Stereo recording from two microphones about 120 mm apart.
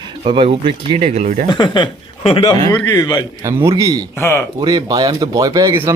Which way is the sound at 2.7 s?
15° left (ahead or behind).